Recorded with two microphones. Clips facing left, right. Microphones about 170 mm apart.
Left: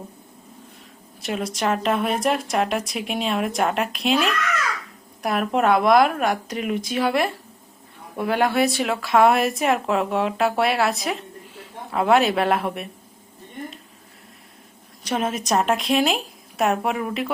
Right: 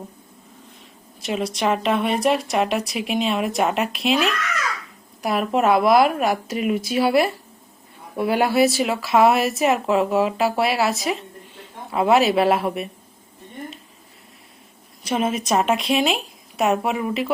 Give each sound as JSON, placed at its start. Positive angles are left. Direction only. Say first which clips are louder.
{"t": 1.2, "sound": "a woman's voice", "louder": "right 2 dB", "side_deg": 0}
{"t": 5.2, "sound": "a woman's voice", "louder": "right 1 dB", "side_deg": 0}
{"t": 15.1, "sound": "a woman's voice", "louder": "right 2 dB", "side_deg": 0}